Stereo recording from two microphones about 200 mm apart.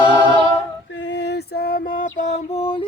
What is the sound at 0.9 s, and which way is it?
Mantra, 60° left (ahead or behind).